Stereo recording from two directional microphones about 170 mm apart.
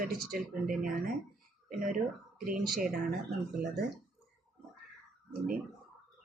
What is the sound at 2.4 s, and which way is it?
Speech, 55° right (ahead or behind).